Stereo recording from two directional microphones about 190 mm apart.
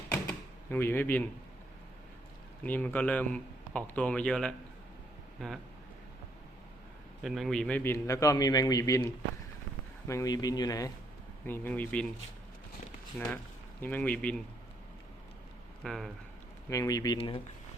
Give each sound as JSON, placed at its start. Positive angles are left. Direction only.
{"t": 0.1, "sound": "door", "side_deg": 10}
{"t": 2.6, "sound": "a man's voice", "side_deg": 10}
{"t": 7.2, "sound": "a man's voice", "side_deg": 0}
{"t": 13.1, "sound": "a man's voice", "side_deg": 10}
{"t": 15.8, "sound": "speech", "side_deg": 0}
{"t": 16.6, "sound": "a man's voice", "side_deg": 15}